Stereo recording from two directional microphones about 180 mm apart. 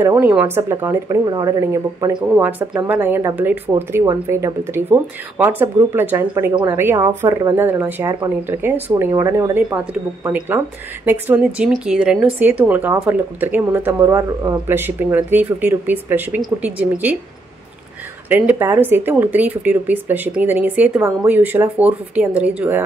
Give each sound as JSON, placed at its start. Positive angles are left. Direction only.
{"t": 0.0, "sound": "speech", "side_deg": -10}
{"t": 18.3, "sound": "speech", "side_deg": -10}